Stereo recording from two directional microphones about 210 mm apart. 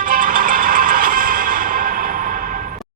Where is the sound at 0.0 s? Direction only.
40° right (ahead or behind).